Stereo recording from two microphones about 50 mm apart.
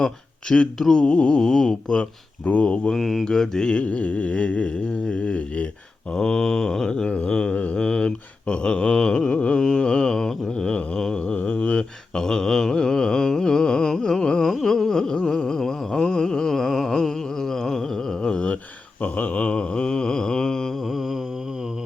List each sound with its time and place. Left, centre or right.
0.0 s speech: centre
0.8 s mantra: centre
1.0 s mantra: left
2.9 s speech: centre
3.2 s mantra: centre
10.9 s a sound: centre
12.1 s music: centre
14.4 s music: centre
19.0 s a sound: left; by 20.7 s centre
20.9 s mantra: centre